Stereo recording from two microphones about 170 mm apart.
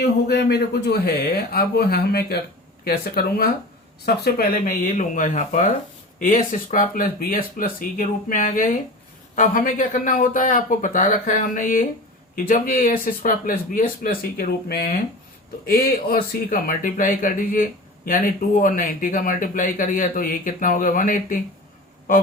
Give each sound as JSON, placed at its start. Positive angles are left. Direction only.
{"t": 0.0, "sound": "a man's voice", "side_deg": 70}